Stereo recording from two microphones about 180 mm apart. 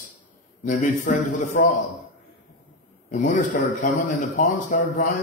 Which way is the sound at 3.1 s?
45° left (ahead or behind).